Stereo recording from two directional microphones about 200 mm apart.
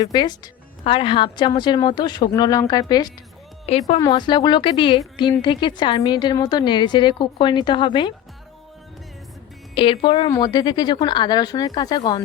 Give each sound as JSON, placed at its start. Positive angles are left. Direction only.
{"t": 0.0, "sound": "speech", "side_deg": 20}
{"t": 3.7, "sound": "a woman's voice", "side_deg": 35}
{"t": 4.0, "sound": "speech", "side_deg": 20}
{"t": 9.7, "sound": "speech", "side_deg": 25}